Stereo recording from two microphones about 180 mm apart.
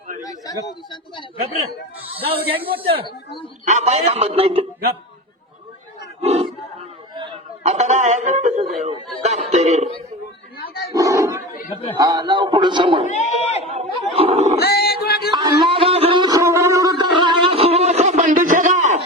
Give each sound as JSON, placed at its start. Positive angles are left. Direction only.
{"t": 0.2, "sound": "chatter", "side_deg": 20}
{"t": 2.1, "sound": "a man's voice", "side_deg": -30}
{"t": 6.2, "sound": "battle cry", "side_deg": -35}
{"t": 7.2, "sound": "a sound", "side_deg": -40}
{"t": 10.9, "sound": "dog", "side_deg": -15}
{"t": 11.9, "sound": "a man's voice", "side_deg": -25}
{"t": 13.1, "sound": "speech", "side_deg": 40}
{"t": 13.6, "sound": "a sound", "side_deg": -35}
{"t": 14.6, "sound": "dog", "side_deg": 65}
{"t": 15.3, "sound": "a sound", "side_deg": -25}